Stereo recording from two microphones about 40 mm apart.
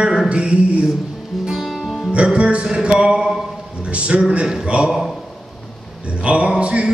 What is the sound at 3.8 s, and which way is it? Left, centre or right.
Speech, right.